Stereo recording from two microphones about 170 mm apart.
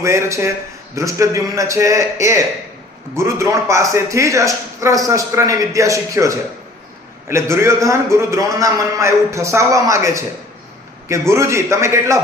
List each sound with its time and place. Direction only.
0.0 s a man's voice: 15° right (ahead or behind)